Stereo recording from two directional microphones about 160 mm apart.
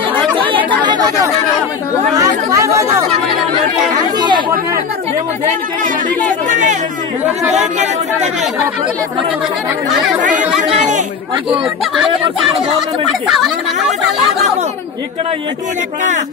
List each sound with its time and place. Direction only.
0.7 s chatter: 30° right (ahead or behind)
2.1 s speech: 20° right (ahead or behind)
6.5 s speech: 50° right (ahead or behind)